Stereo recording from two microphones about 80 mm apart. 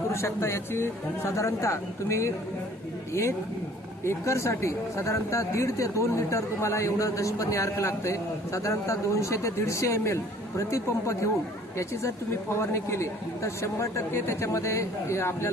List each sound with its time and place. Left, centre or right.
0.1 s speech: left
12.5 s speech: left